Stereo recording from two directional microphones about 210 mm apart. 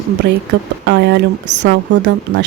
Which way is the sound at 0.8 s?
55° right (ahead or behind).